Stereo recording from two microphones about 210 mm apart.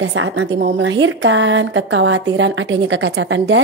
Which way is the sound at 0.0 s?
65° right (ahead or behind).